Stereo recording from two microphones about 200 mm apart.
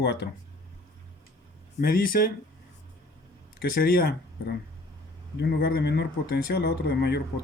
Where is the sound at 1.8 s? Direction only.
50° left (ahead or behind).